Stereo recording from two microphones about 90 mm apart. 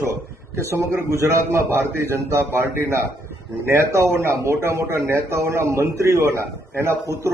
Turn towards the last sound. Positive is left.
turn(degrees=-30)  # may be behind; listen again after turning